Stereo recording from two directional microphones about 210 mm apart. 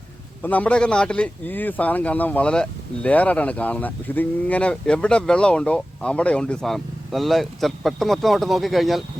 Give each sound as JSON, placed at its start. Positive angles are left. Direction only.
{"t": 0.4, "sound": "speech", "side_deg": 5}